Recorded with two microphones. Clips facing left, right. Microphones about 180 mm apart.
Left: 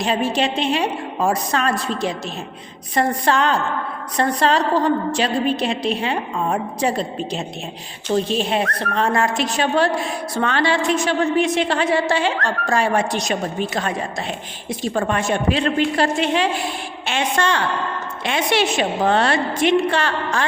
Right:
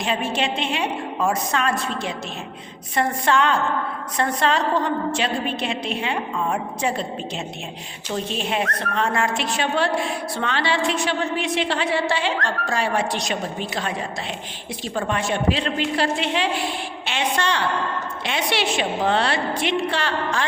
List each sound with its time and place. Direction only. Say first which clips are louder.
0.0 s a woman's voice: left 4 dB; 35° left (ahead or behind)
14.9 s a woman's voice: left 2 dB; 50° left (ahead or behind)